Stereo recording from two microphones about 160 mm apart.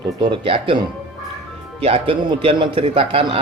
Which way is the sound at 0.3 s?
35° right (ahead or behind).